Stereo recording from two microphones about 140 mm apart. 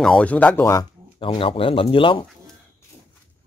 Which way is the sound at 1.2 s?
40° left (ahead or behind).